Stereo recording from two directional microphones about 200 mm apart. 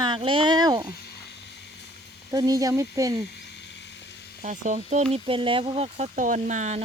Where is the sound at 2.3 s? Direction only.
20° right (ahead or behind).